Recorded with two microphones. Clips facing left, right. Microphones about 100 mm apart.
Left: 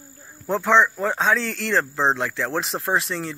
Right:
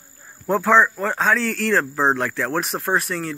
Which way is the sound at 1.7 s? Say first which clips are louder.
Even; 5° right (ahead or behind).